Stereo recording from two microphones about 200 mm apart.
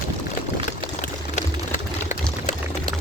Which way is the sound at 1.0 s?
35° left (ahead or behind).